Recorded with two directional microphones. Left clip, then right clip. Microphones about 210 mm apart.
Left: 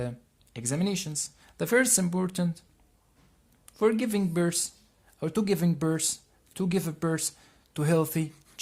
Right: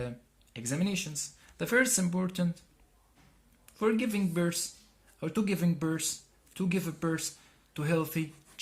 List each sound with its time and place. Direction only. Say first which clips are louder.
0.5 s speech: left 3 dB; 55° left (ahead or behind)
3.7 s speech: left 4 dB; 55° left (ahead or behind)